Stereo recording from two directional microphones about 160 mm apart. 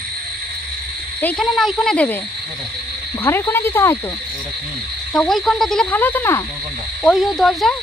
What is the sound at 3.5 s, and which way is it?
Speech, 15° left (ahead or behind).